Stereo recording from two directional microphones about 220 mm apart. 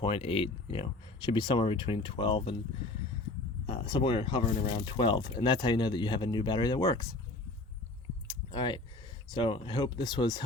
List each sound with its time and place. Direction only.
0.0 s speech: 25° left (ahead or behind)
3.7 s speech: 25° left (ahead or behind)
8.5 s speech: 20° left (ahead or behind)